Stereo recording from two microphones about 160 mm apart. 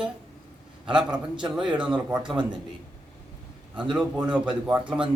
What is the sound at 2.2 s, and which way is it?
Speech, 30° right (ahead or behind).